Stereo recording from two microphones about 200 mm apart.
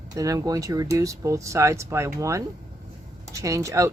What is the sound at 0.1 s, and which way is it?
Speech, 15° right (ahead or behind).